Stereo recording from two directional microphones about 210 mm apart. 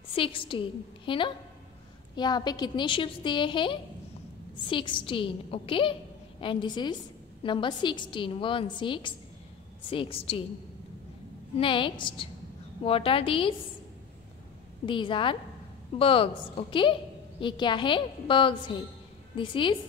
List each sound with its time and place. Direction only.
0.1 s a woman's voice: 25° left (ahead or behind)
11.5 s a woman's voice: 25° left (ahead or behind)
14.9 s a woman's voice: 25° left (ahead or behind)